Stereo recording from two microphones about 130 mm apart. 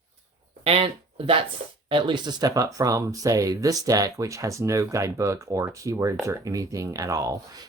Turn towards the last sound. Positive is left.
turn(degrees=-25)  # may be behind; listen again after turning